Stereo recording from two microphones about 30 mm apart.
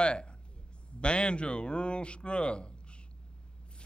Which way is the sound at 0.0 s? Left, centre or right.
Left.